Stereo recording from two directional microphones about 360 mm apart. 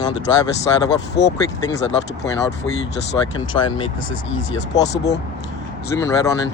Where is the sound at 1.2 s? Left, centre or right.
Left.